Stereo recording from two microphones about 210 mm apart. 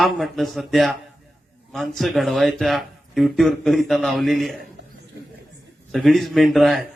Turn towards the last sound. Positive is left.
turn(degrees=0)  # may be behind; listen again after turning